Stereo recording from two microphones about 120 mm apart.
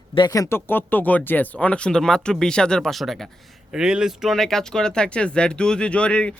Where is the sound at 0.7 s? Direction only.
15° left (ahead or behind).